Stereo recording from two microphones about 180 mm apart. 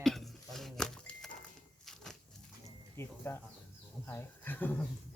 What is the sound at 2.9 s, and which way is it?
Speech, 15° left (ahead or behind).